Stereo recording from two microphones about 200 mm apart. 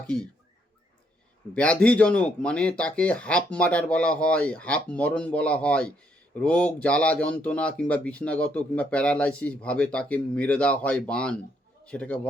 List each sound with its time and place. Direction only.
1.5 s speech: 5° left (ahead or behind)